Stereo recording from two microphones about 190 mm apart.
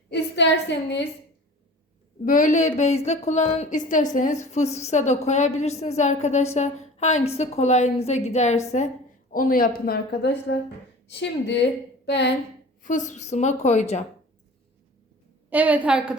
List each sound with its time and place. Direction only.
0.1 s a sound: 65° left (ahead or behind)
2.2 s a woman's voice: 45° left (ahead or behind)
9.3 s a woman's voice: 50° left (ahead or behind); by 12.3 s 65° left (ahead or behind)
12.8 s a woman's voice: 40° left (ahead or behind)
15.4 s a woman's voice: 10° right (ahead or behind)